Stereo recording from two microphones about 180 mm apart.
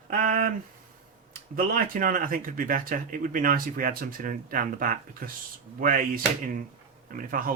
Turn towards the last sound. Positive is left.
turn(degrees=-50)  # may be behind; listen again after turning